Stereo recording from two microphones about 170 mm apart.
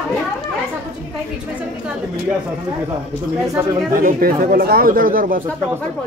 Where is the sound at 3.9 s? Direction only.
55° right (ahead or behind).